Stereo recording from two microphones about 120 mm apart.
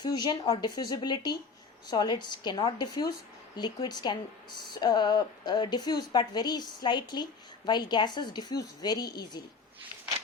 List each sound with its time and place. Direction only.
0.0 s a woman's voice: 35° left (ahead or behind)